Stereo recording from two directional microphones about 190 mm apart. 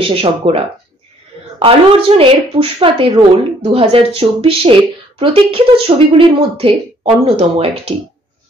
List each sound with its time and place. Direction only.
0.0 s a woman's voice: 30° right (ahead or behind)